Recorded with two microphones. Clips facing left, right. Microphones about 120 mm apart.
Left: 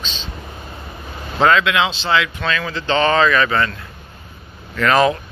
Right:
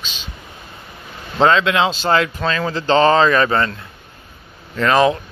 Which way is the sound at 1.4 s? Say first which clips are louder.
Right 1 dB; 25° right (ahead or behind).